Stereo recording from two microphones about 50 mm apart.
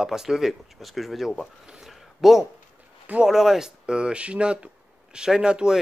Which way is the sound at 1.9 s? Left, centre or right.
Centre.